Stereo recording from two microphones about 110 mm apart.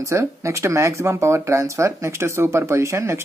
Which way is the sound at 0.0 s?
25° right (ahead or behind).